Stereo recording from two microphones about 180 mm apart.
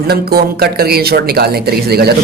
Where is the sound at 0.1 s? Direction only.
60° right (ahead or behind).